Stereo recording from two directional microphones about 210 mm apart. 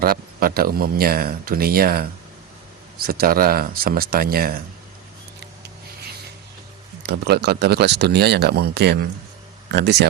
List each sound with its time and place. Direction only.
0.0 s speech: 45° right (ahead or behind)
7.0 s speech: 50° right (ahead or behind)